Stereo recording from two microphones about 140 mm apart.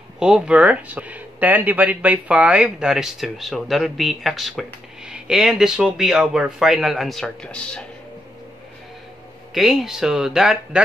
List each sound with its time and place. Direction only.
0.2 s speech: 5° right (ahead or behind)
9.5 s speech: 5° right (ahead or behind)